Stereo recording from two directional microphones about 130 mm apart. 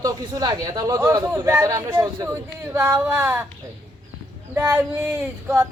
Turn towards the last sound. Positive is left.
turn(degrees=-15)  # may be behind; listen again after turning